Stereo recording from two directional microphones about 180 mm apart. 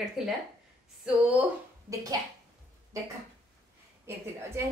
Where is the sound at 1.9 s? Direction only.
20° right (ahead or behind).